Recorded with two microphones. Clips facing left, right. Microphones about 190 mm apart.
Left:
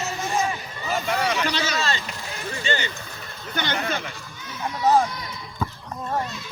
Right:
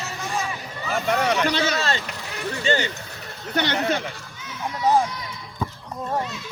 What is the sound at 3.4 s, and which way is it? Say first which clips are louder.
Speech: right 4 dB; 70° right (ahead or behind).